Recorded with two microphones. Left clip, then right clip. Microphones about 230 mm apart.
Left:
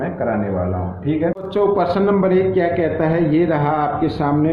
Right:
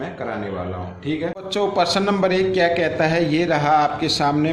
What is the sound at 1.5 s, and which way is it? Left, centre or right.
A man's voice, right.